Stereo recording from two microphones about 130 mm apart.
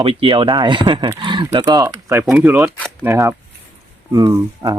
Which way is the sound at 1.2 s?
35° right (ahead or behind).